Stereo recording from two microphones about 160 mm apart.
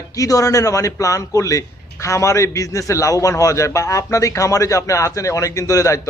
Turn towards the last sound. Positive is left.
turn(degrees=20)  # may be behind; listen again after turning